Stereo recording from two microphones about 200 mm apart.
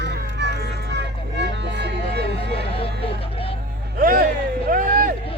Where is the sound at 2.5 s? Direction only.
25° left (ahead or behind).